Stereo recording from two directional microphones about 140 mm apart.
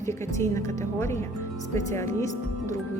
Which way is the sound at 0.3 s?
20° left (ahead or behind).